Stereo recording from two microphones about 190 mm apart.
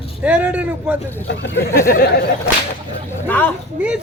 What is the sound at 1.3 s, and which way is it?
Speech, 65° left (ahead or behind).